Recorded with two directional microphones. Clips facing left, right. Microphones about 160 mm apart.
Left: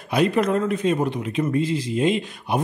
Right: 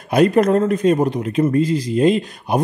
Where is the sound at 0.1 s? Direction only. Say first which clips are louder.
Right 6 dB; 45° right (ahead or behind).